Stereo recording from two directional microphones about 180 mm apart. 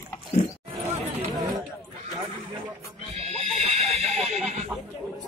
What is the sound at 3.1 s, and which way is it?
Neigh, 35° right (ahead or behind).